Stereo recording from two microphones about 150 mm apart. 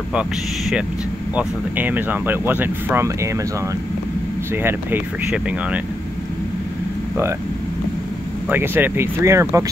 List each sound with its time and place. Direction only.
0.1 s speech: 5° right (ahead or behind)
4.6 s speech: 10° right (ahead or behind)
8.5 s speech: 15° right (ahead or behind)